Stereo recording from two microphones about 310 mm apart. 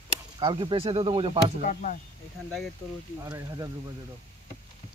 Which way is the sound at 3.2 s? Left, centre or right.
Centre.